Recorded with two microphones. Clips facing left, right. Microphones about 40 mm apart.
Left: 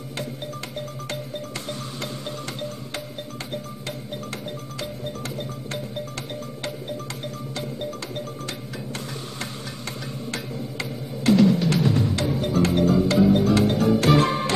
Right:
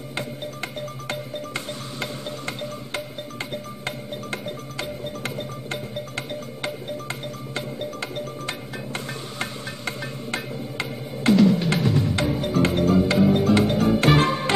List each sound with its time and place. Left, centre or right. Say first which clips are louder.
0.1 s music: right 1 dB; right